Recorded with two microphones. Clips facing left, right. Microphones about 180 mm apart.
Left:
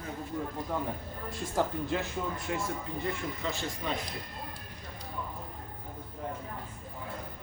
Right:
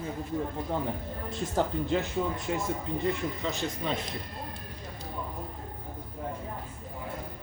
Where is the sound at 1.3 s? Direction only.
20° right (ahead or behind).